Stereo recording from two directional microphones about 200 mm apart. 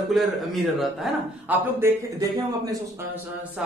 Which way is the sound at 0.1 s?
Centre (ahead or behind).